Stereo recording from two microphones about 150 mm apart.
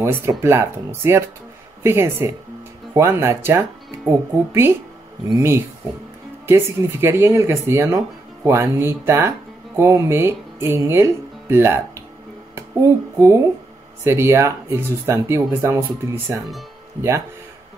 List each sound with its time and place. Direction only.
0.0 s speech: 20° right (ahead or behind)